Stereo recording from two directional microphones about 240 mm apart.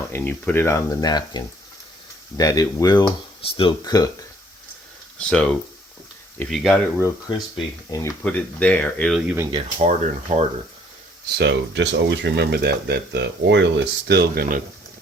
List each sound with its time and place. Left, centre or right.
0.1 s speech: centre
5.3 s speech: centre
7.0 s speech: centre
9.5 s speech: right
11.3 s speech: right